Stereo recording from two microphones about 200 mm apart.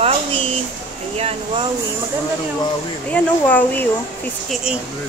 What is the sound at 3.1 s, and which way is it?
Speech, 10° left (ahead or behind).